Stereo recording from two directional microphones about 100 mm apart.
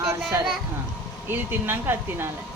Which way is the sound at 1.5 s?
20° right (ahead or behind).